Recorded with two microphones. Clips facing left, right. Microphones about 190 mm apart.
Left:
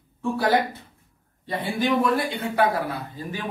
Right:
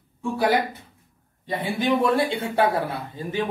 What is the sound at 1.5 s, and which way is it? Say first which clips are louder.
A man's voice: right 1 dB; 25° right (ahead or behind).